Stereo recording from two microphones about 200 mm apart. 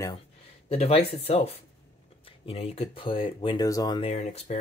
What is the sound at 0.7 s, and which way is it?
Speech, 30° left (ahead or behind).